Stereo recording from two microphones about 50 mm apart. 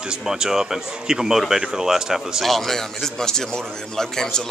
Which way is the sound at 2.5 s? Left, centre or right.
Centre.